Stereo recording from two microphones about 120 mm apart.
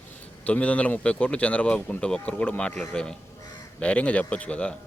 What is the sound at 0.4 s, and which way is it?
A man's voice, 10° left (ahead or behind).